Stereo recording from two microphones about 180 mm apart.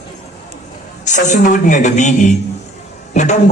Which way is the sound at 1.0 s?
40° left (ahead or behind).